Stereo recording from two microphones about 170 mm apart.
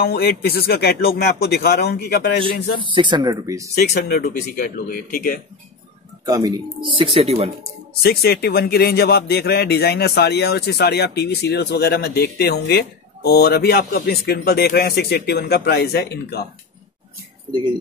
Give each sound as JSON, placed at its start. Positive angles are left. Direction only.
{"t": 0.0, "sound": "a man's voice", "side_deg": 65}
{"t": 2.8, "sound": "speech", "side_deg": -30}
{"t": 3.9, "sound": "speech", "side_deg": 65}
{"t": 6.2, "sound": "speech", "side_deg": -20}
{"t": 7.9, "sound": "a man's voice", "side_deg": 65}